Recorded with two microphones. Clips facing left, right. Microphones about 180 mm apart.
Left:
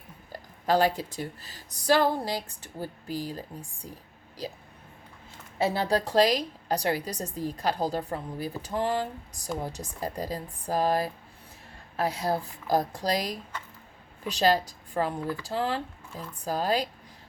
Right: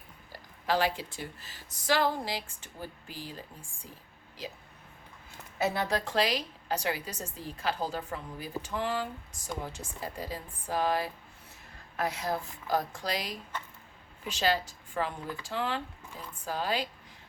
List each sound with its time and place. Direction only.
0.3 s a woman's voice: 45° left (ahead or behind)
5.5 s a woman's voice: 30° left (ahead or behind)